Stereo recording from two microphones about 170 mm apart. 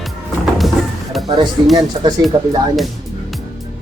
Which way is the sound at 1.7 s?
25° right (ahead or behind).